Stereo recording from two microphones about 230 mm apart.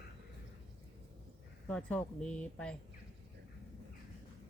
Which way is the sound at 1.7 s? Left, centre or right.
Centre.